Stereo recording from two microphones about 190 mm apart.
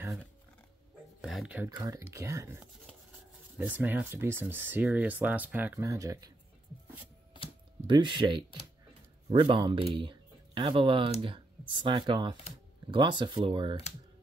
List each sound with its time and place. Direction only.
1.2 s speech: centre (ahead or behind)
1.7 s speech: 20° right (ahead or behind)
7.8 s speech: 25° right (ahead or behind)